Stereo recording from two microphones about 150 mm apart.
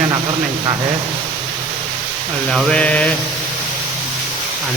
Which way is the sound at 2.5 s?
5° left (ahead or behind).